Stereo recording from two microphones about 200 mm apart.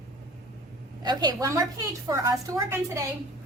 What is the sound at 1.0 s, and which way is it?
A woman's voice, 20° right (ahead or behind).